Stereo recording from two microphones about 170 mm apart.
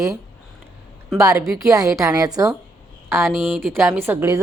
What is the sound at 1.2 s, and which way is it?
A woman's voice, 15° right (ahead or behind).